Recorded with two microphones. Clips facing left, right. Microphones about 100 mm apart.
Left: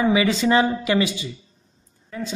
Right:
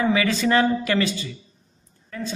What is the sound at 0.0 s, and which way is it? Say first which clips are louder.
A man's voice: left 2 dB; 15° left (ahead or behind).